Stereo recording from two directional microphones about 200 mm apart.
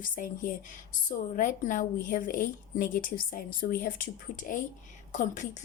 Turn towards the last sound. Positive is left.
turn(degrees=40)  # may be behind; listen again after turning